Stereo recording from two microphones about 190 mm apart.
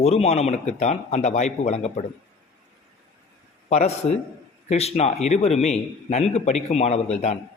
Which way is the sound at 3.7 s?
35° left (ahead or behind).